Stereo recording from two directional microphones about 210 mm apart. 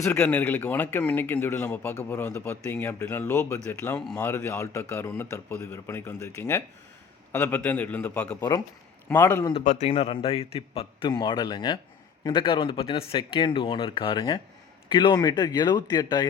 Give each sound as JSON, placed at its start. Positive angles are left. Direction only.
{"t": 0.0, "sound": "speech", "side_deg": 10}
{"t": 9.5, "sound": "a man's voice", "side_deg": 30}